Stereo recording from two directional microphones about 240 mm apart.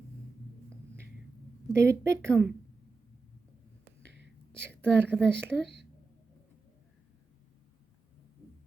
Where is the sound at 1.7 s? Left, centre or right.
Centre.